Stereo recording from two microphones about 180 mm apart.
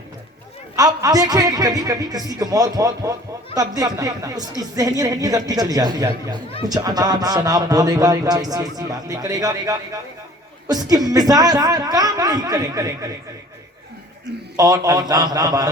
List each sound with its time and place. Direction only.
0.8 s a man's voice: 20° right (ahead or behind)
14.5 s a man's voice: 20° right (ahead or behind)